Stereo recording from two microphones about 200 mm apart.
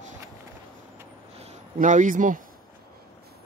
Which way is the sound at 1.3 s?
40° right (ahead or behind).